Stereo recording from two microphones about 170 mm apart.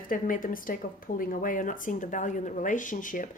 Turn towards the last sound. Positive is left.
turn(degrees=50)  # may be behind; listen again after turning